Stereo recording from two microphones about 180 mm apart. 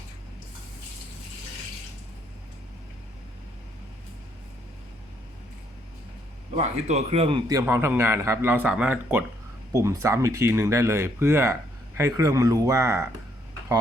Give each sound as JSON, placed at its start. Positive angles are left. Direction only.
{"t": 6.6, "sound": "a man's voice", "side_deg": -35}